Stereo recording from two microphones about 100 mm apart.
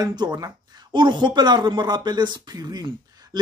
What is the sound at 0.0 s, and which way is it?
Speech, 45° right (ahead or behind).